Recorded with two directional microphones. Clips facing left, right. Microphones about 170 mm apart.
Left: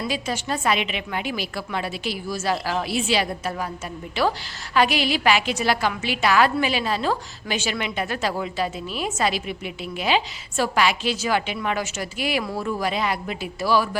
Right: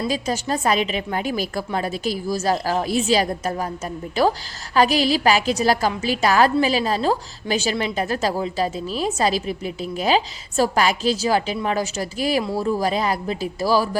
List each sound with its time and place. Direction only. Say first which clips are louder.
0.1 s a woman's voice: right 3 dB; 40° right (ahead or behind)